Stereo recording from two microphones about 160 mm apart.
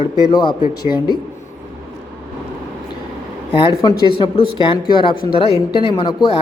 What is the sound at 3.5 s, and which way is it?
Speech, 35° left (ahead or behind).